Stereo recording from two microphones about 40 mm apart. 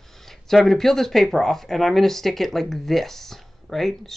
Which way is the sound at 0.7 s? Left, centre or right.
Centre.